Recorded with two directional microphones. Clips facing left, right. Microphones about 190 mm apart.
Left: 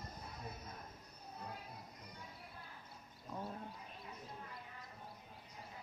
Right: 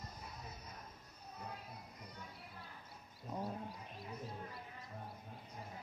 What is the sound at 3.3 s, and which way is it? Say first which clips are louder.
Goat: right 3 dB; 20° right (ahead or behind).